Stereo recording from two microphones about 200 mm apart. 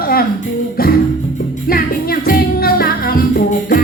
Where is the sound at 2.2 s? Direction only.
50° left (ahead or behind).